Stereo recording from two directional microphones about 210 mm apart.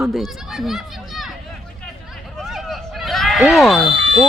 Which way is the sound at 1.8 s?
Centre (ahead or behind).